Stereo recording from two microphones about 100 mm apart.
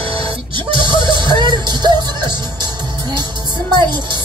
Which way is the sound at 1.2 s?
50° right (ahead or behind).